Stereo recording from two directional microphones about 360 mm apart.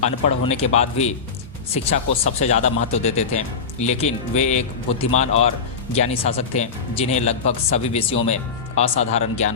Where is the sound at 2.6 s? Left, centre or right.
Centre.